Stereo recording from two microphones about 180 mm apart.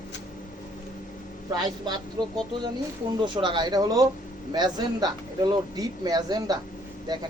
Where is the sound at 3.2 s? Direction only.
25° right (ahead or behind).